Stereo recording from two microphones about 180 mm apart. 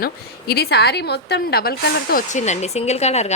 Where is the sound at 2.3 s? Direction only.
40° left (ahead or behind).